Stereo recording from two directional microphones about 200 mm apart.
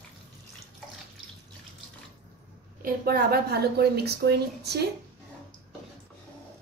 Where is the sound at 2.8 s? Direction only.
45° right (ahead or behind).